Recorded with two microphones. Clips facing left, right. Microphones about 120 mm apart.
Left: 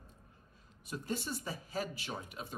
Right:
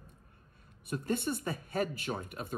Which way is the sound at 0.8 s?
55° right (ahead or behind).